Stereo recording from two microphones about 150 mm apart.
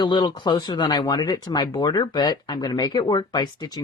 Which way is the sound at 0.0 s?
30° left (ahead or behind).